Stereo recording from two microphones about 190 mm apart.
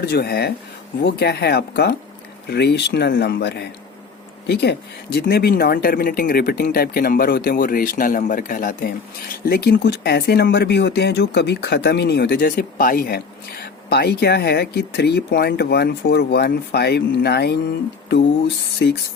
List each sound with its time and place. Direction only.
0.0 s speech: 55° left (ahead or behind)